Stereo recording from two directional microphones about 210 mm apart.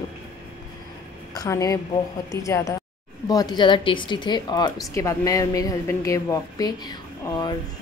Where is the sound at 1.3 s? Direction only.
15° left (ahead or behind).